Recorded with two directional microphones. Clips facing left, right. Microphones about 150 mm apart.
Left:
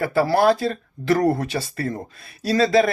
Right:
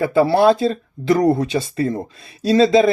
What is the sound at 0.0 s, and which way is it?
Speech, 20° right (ahead or behind).